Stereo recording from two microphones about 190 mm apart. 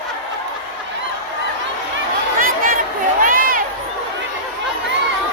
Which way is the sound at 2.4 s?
50° right (ahead or behind).